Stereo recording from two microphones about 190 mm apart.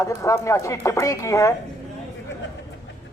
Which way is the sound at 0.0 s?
15° left (ahead or behind).